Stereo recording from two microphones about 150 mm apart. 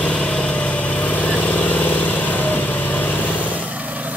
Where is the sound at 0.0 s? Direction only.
5° left (ahead or behind).